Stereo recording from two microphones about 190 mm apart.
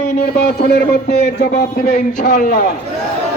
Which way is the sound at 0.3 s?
55° left (ahead or behind).